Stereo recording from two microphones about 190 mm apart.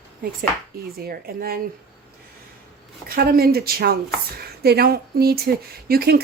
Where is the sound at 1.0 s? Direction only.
50° right (ahead or behind).